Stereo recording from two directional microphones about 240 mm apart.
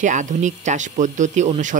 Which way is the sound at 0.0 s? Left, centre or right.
Right.